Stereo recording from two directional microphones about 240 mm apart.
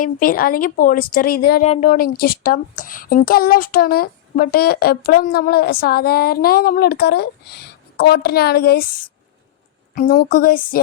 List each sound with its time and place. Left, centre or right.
0.0 s speech: left